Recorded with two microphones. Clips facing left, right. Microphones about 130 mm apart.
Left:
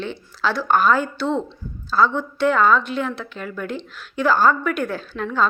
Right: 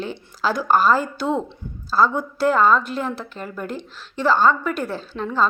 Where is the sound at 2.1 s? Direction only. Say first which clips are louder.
Even; 5° right (ahead or behind).